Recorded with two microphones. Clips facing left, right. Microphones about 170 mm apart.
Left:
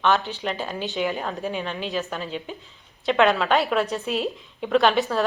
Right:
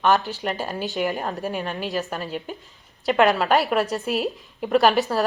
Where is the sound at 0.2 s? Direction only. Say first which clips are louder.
Right 1 dB; 40° right (ahead or behind).